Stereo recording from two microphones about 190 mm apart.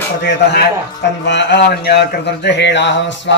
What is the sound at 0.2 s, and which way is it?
Speech, 65° left (ahead or behind).